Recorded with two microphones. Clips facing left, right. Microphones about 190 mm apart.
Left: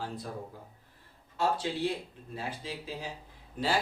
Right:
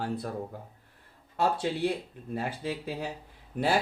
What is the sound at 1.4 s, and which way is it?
Speech, 60° right (ahead or behind).